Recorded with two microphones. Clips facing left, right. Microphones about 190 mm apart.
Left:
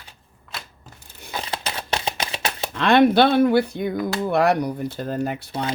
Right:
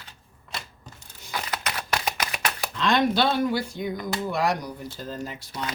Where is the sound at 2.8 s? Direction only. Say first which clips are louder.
Left 7 dB; 60° left (ahead or behind).